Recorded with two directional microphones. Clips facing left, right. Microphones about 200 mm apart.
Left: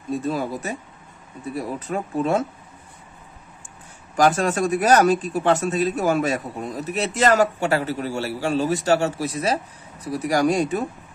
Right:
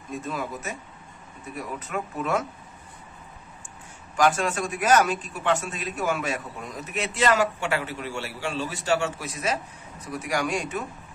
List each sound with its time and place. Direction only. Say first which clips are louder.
0.1 s speech: left 7 dB; 35° left (ahead or behind)
4.2 s speech: left 4 dB; 40° left (ahead or behind)